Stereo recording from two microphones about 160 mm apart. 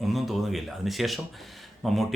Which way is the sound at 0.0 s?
Centre (ahead or behind).